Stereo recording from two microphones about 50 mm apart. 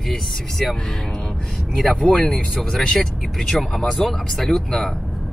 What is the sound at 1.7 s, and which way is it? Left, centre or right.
Speech, centre.